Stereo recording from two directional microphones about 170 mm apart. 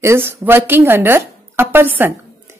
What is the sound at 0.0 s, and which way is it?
A woman's voice, 15° right (ahead or behind).